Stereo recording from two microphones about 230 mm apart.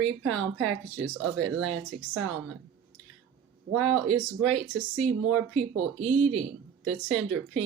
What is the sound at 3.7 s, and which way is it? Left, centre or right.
Speech, right.